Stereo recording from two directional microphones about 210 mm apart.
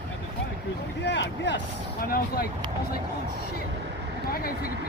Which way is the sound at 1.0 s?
55° left (ahead or behind).